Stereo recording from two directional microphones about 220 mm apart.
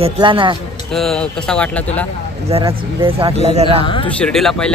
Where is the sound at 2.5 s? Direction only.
30° right (ahead or behind).